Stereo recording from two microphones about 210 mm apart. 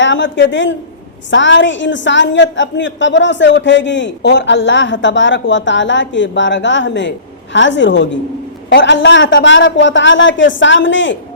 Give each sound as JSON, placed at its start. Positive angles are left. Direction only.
{"t": 0.0, "sound": "a woman's voice", "side_deg": 60}